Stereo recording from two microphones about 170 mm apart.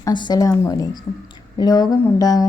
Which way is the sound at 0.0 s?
25° left (ahead or behind).